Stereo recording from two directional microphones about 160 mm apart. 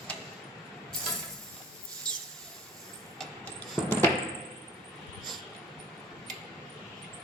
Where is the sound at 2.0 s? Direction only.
5° left (ahead or behind).